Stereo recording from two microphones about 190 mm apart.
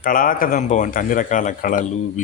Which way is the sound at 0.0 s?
45° left (ahead or behind).